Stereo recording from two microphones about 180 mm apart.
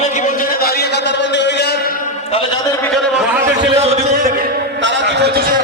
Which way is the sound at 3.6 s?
35° right (ahead or behind).